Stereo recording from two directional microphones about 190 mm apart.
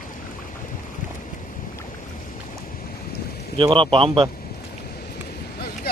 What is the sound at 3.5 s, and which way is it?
Speech, 25° right (ahead or behind).